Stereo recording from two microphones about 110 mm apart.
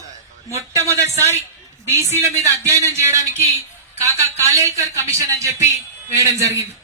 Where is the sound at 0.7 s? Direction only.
25° right (ahead or behind).